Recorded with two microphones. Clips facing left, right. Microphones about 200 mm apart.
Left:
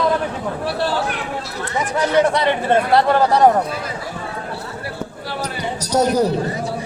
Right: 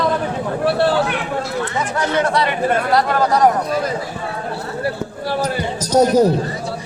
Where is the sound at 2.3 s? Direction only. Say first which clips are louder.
Left 1 dB; 25° left (ahead or behind).